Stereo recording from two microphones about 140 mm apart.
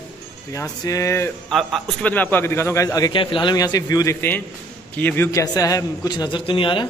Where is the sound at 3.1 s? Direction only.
35° left (ahead or behind).